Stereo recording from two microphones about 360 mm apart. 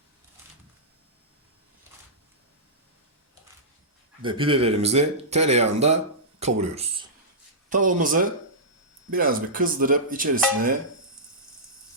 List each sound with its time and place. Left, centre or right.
4.2 s speech: centre